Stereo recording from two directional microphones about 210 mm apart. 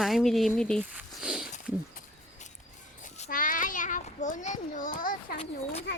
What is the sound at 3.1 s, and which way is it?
Children playing, 35° left (ahead or behind).